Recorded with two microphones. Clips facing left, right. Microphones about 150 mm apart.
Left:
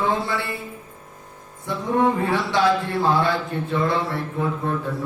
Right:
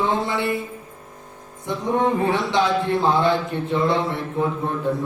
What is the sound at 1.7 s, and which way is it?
Speech, 20° right (ahead or behind).